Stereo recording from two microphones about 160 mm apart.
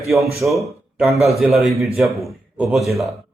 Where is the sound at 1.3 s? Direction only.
Centre (ahead or behind).